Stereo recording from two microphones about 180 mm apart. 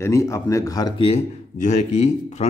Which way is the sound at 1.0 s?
35° left (ahead or behind).